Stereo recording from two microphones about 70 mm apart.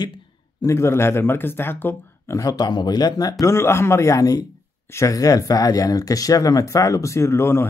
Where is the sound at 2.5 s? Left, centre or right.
Left.